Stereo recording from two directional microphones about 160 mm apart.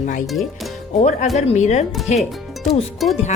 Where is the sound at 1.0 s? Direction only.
45° left (ahead or behind).